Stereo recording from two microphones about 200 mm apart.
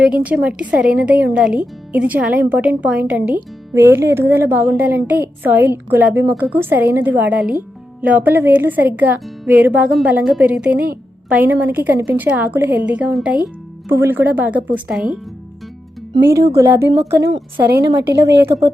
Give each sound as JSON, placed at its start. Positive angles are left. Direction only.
{"t": 0.0, "sound": "a woman's voice", "side_deg": -5}
{"t": 16.2, "sound": "speech", "side_deg": -15}